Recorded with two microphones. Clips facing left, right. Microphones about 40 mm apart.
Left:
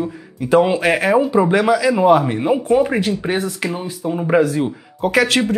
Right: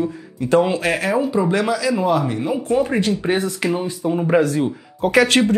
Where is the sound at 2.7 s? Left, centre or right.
Centre.